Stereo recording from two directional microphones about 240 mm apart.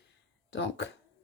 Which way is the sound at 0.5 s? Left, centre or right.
Left.